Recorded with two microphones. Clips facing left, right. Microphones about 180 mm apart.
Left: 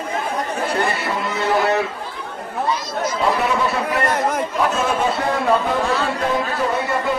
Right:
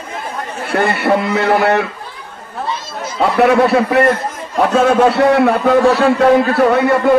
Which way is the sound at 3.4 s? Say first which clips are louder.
Right 9 dB; 65° right (ahead or behind).